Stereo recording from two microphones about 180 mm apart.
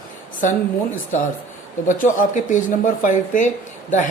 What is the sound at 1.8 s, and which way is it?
A woman's voice, 45° left (ahead or behind).